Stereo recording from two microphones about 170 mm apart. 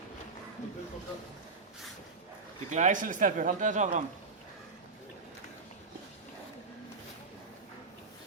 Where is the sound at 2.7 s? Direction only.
50° right (ahead or behind).